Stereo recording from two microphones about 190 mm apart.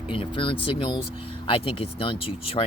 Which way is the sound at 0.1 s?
25° left (ahead or behind).